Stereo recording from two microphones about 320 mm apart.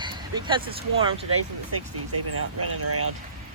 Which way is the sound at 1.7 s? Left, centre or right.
Right.